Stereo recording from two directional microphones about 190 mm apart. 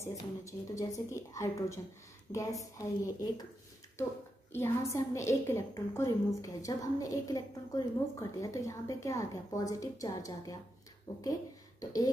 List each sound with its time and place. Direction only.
0.0 s a woman's voice: 15° left (ahead or behind)
2.8 s a woman's voice: 20° left (ahead or behind)
4.6 s a woman's voice: 15° left (ahead or behind)